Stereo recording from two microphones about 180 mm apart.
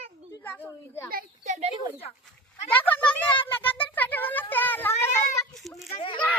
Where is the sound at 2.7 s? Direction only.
10° left (ahead or behind).